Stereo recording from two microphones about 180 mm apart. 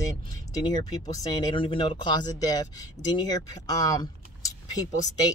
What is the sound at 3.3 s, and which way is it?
Speech, 20° left (ahead or behind).